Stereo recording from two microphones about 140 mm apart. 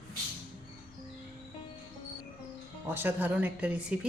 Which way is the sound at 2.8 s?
15° right (ahead or behind).